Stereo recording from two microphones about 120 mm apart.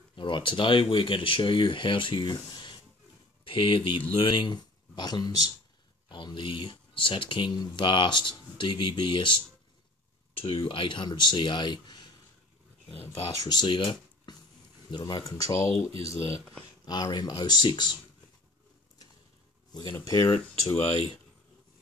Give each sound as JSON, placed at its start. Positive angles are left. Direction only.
{"t": 0.1, "sound": "speech", "side_deg": 45}
{"t": 10.4, "sound": "speech", "side_deg": 45}
{"t": 12.8, "sound": "speech", "side_deg": 50}
{"t": 13.4, "sound": "speech", "side_deg": 35}
{"t": 16.8, "sound": "speech", "side_deg": 35}
{"t": 19.9, "sound": "speech", "side_deg": 30}